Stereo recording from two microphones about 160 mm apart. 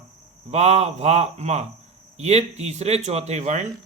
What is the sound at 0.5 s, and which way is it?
Speech, 45° right (ahead or behind).